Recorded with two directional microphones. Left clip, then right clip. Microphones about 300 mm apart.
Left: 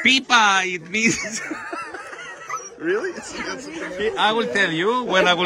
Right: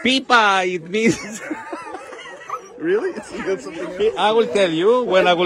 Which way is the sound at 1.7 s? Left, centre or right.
Right.